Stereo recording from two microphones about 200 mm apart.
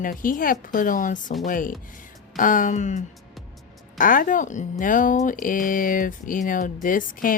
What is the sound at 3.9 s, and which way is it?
Speech, 45° left (ahead or behind).